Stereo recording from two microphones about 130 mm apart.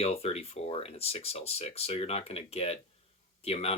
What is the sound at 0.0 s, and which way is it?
Speech, 50° left (ahead or behind).